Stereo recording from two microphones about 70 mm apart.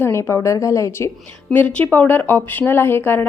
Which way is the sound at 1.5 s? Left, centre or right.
Left.